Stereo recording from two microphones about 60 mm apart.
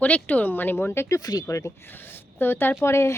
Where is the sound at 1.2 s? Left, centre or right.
Left.